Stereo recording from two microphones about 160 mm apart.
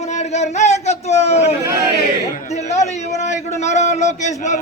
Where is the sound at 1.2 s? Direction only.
40° left (ahead or behind).